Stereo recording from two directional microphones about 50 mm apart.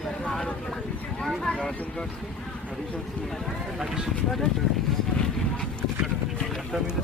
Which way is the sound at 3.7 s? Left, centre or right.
Centre.